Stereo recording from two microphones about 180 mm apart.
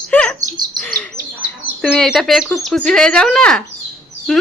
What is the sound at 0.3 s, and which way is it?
Bird, 20° right (ahead or behind).